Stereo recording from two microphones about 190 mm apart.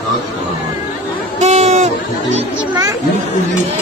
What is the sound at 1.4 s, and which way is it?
Music, 35° right (ahead or behind).